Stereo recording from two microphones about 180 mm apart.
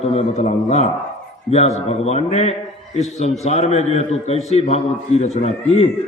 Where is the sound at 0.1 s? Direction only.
35° left (ahead or behind).